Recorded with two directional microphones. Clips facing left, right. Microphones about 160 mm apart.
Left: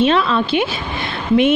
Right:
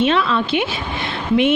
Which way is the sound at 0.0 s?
35° left (ahead or behind).